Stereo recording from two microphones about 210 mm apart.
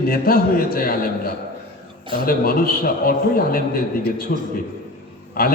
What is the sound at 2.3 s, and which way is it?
A man's voice, 45° left (ahead or behind).